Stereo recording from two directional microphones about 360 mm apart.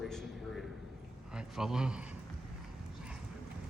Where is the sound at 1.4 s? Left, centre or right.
Centre.